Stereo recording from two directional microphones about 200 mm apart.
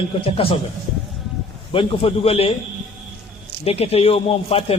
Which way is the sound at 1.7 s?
25° left (ahead or behind).